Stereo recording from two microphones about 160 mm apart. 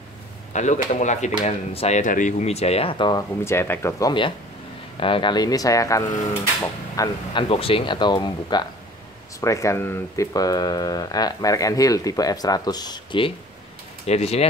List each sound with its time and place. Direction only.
0.5 s speech: 50° left (ahead or behind)
2.0 s speech: 55° left (ahead or behind); by 3.3 s 30° left (ahead or behind)
3.4 s speech: 15° left (ahead or behind)
5.0 s speech: 30° left (ahead or behind)
7.4 s speech: 35° left (ahead or behind)
14.0 s speech: 40° left (ahead or behind)